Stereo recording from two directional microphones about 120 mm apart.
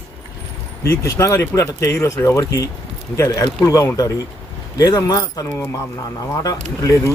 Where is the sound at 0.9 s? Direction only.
20° left (ahead or behind).